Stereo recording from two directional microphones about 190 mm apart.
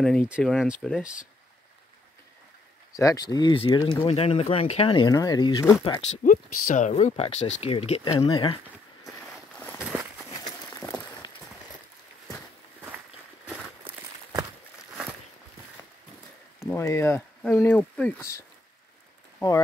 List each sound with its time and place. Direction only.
0.0 s speech: 5° left (ahead or behind)
3.0 s speech: 20° left (ahead or behind)
6.2 s speech: 45° left (ahead or behind); by 8.5 s 25° left (ahead or behind)
9.6 s walk: 10° left (ahead or behind)
10.3 s a sound: 20° left (ahead or behind)
16.5 s speech: 15° left (ahead or behind)